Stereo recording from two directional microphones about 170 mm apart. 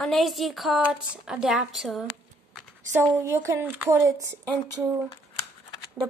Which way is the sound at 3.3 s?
15° right (ahead or behind).